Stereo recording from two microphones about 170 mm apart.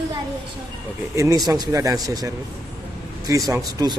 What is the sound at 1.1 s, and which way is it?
A man's voice, 15° right (ahead or behind).